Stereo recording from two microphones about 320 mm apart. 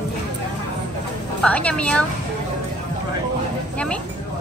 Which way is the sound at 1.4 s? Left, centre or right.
Centre.